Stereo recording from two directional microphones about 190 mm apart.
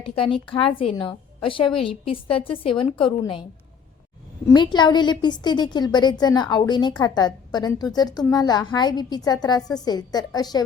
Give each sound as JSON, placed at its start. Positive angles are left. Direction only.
{"t": 0.0, "sound": "a woman's voice", "side_deg": 30}
{"t": 4.4, "sound": "a woman's voice", "side_deg": 25}